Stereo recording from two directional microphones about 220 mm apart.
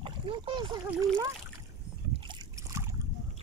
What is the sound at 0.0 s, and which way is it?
Speech, 25° right (ahead or behind).